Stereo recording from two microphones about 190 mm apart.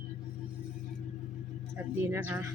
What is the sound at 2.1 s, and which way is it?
Speech, 10° right (ahead or behind).